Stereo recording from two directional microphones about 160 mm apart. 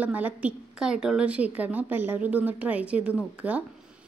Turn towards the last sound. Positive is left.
turn(degrees=-10)  # may be behind; listen again after turning